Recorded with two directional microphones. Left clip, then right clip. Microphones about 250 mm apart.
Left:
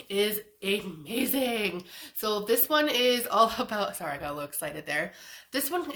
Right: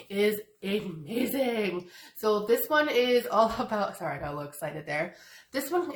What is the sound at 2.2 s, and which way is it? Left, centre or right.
Speech, left.